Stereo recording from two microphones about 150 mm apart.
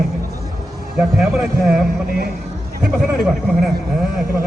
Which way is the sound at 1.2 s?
Centre (ahead or behind).